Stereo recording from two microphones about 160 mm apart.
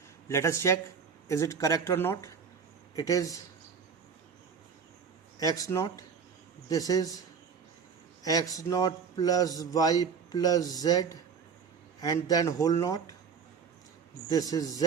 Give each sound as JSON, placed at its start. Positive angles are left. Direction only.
{"t": 0.3, "sound": "a man's voice", "side_deg": 15}
{"t": 5.4, "sound": "a man's voice", "side_deg": 20}
{"t": 8.2, "sound": "a man's voice", "side_deg": 25}
{"t": 14.3, "sound": "a man's voice", "side_deg": 25}